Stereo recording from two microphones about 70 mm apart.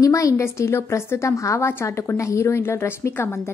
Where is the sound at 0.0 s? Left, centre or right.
Left.